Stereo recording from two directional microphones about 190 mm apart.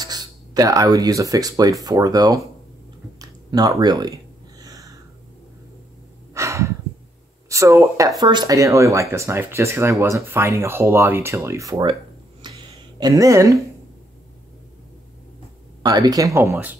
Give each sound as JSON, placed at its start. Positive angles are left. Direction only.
{"t": 0.0, "sound": "speech", "side_deg": -20}
{"t": 3.2, "sound": "a sound", "side_deg": -20}
{"t": 6.3, "sound": "breathing", "side_deg": -15}
{"t": 7.4, "sound": "speech", "side_deg": -15}
{"t": 15.8, "sound": "speech", "side_deg": -20}